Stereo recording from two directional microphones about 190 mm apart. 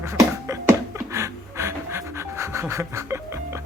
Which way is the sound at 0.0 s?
15° right (ahead or behind).